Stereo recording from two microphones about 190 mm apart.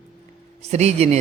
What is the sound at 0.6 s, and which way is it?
Speech, 35° right (ahead or behind).